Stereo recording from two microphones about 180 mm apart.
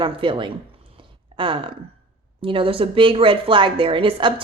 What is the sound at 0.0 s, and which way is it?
Speech, 25° right (ahead or behind).